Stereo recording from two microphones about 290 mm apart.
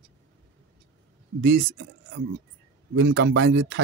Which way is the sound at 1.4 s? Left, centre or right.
Right.